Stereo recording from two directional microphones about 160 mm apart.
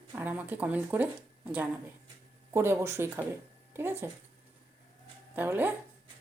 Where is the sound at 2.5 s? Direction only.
15° right (ahead or behind).